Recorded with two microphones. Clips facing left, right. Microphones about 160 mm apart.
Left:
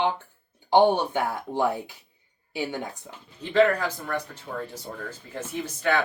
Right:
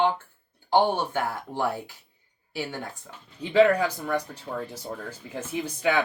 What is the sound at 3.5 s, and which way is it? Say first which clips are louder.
Speech: right 2 dB; 10° right (ahead or behind).